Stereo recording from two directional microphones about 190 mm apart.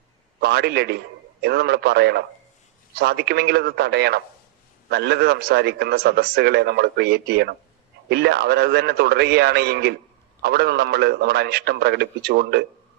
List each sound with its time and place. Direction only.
0.3 s a man's voice: 60° right (ahead or behind)